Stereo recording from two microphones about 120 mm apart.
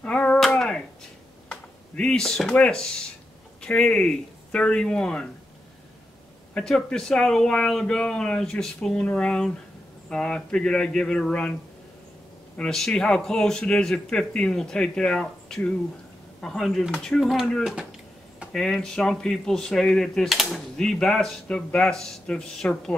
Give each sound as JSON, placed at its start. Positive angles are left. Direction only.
{"t": 0.0, "sound": "a sound", "side_deg": 10}
{"t": 1.5, "sound": "speech", "side_deg": 10}
{"t": 6.5, "sound": "speech", "side_deg": 5}
{"t": 12.5, "sound": "speech", "side_deg": 5}